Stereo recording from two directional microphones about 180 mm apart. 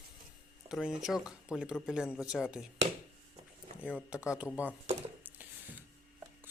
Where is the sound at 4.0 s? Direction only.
5° right (ahead or behind).